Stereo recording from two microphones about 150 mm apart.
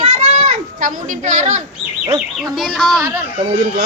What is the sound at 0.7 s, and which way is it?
Speech, 60° right (ahead or behind).